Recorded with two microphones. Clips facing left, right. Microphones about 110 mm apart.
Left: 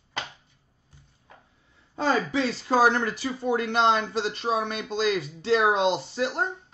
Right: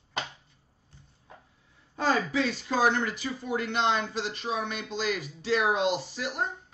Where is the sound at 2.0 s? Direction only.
30° left (ahead or behind).